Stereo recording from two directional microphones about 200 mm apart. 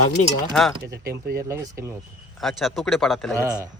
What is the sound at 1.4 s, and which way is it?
Speech, 15° right (ahead or behind).